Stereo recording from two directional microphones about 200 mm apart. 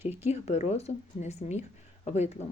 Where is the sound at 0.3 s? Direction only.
35° left (ahead or behind).